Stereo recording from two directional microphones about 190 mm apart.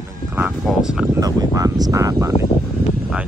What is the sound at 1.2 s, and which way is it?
Speech, 20° right (ahead or behind).